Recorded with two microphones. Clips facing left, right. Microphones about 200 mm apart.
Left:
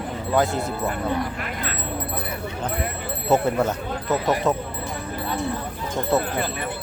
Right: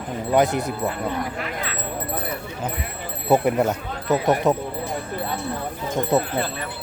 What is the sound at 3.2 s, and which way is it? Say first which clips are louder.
Speech: right 2 dB; 15° right (ahead or behind).